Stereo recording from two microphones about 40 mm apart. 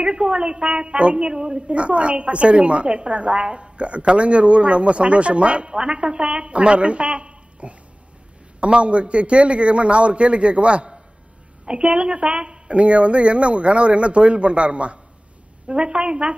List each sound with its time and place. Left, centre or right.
0.0 s a woman's voice: right